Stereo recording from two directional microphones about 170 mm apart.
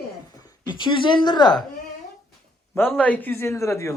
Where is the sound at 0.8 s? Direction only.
25° left (ahead or behind).